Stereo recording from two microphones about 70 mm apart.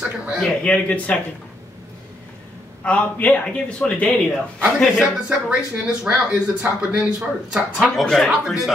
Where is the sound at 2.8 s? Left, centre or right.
Left.